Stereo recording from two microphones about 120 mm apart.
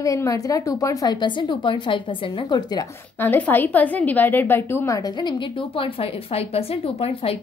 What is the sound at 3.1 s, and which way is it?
A woman's voice, 15° left (ahead or behind).